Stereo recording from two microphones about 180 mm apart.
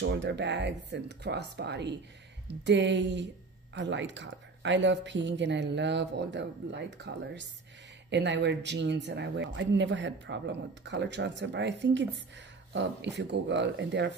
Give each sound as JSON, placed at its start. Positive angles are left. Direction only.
{"t": 0.0, "sound": "speech", "side_deg": -75}